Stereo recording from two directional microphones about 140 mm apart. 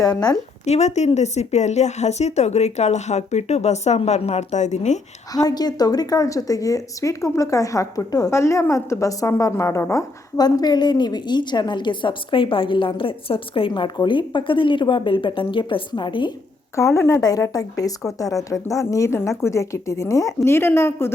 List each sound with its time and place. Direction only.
0.0 s a woman's voice: 30° left (ahead or behind)
0.6 s speech: 55° left (ahead or behind)
5.3 s a woman's voice: 25° left (ahead or behind)
16.7 s a woman's voice: 20° left (ahead or behind)